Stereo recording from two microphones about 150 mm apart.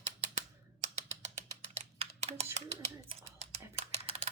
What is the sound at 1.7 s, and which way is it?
Typing, 45° right (ahead or behind).